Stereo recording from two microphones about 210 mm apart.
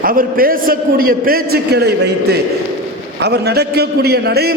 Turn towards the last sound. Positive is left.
turn(degrees=-50)  # may be behind; listen again after turning